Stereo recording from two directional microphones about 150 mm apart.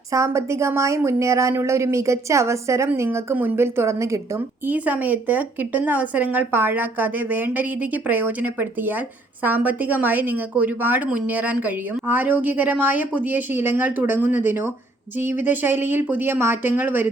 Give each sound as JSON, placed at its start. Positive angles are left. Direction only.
{"t": 0.1, "sound": "a woman's voice", "side_deg": -20}